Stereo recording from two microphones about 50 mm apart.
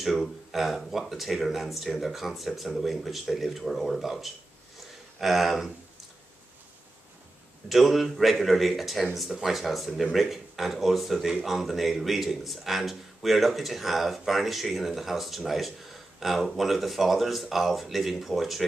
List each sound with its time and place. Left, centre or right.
0.0 s speech: centre
7.6 s speech: centre